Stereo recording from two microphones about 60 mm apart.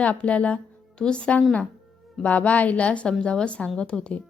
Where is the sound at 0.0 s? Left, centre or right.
Left.